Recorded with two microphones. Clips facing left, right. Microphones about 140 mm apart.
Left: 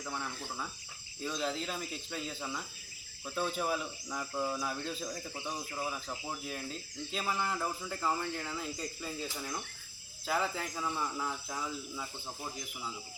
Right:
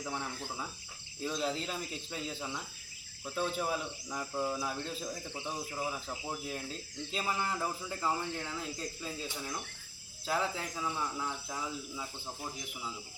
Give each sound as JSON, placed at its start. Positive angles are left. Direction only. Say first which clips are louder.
{"t": 0.0, "sound": "speech", "louder": "right 1 dB", "side_deg": -10}